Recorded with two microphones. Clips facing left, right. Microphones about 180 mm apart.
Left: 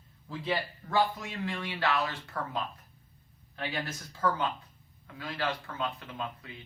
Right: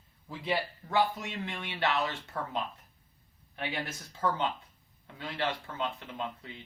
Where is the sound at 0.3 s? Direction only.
15° right (ahead or behind).